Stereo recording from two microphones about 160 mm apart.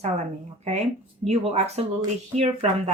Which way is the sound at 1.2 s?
40° right (ahead or behind).